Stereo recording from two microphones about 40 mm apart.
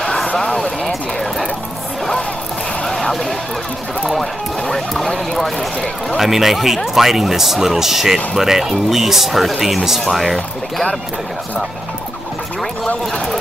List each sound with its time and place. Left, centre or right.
0.0 s a sound: centre
0.4 s speech: centre
3.0 s a sound: centre
4.2 s music: centre
5.1 s speech: centre
6.1 s speech: centre